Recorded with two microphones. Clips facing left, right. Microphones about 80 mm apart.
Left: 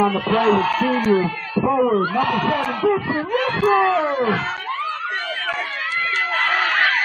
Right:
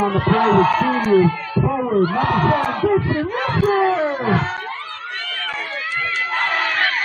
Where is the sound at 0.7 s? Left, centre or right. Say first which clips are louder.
Right 2 dB; centre.